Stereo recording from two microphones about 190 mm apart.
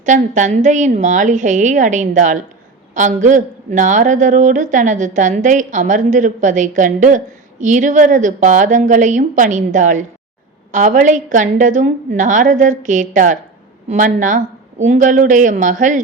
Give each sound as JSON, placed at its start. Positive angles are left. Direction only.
{"t": 0.0, "sound": "a woman's voice", "side_deg": -40}